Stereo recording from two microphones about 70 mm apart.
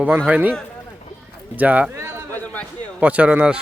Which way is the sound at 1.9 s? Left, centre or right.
Right.